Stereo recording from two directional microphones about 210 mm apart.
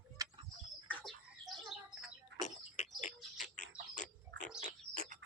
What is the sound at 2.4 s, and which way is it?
Bird, 35° left (ahead or behind).